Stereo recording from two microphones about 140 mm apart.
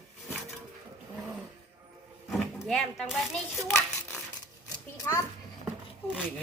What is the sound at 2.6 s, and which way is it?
Speech, 5° left (ahead or behind).